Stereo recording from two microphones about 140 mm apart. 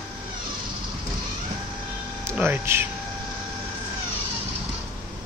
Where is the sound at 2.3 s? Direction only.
15° right (ahead or behind).